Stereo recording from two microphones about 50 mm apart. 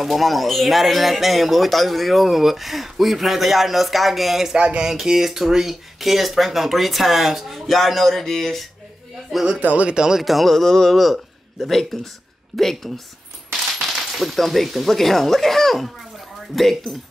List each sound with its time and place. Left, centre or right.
0.0 s speech: centre
4.6 s a sound: right
4.8 s speech: centre
9.6 s speech: right
9.8 s speech: centre
10.2 s a woman's voice: centre